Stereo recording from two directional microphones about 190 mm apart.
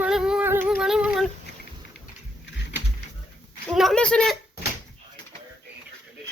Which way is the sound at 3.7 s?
Centre (ahead or behind).